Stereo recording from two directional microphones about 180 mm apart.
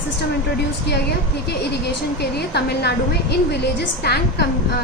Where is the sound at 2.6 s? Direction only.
65° left (ahead or behind).